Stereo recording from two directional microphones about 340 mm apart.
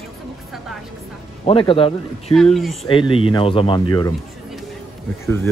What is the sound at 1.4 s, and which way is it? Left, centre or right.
Speech, centre.